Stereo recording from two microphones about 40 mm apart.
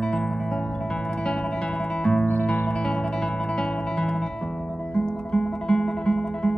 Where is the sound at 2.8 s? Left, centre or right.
Centre.